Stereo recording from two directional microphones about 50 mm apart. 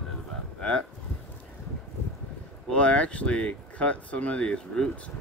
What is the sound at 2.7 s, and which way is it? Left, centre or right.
Speech, left.